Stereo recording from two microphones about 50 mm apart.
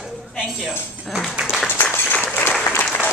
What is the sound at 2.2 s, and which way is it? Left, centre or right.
Applause, left.